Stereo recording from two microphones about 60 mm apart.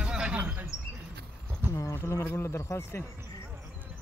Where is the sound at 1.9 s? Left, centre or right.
Left.